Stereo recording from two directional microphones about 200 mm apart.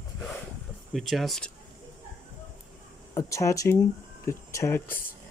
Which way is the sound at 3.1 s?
15° left (ahead or behind).